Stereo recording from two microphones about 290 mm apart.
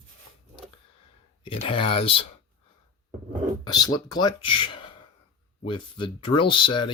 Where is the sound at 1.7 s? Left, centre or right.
Centre.